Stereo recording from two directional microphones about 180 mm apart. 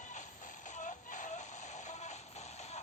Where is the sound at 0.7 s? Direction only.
45° left (ahead or behind).